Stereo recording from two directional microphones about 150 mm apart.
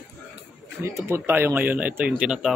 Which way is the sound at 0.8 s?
20° right (ahead or behind).